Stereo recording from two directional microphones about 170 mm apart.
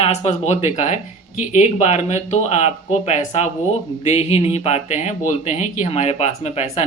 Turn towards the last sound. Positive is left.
turn(degrees=40)  # may be behind; listen again after turning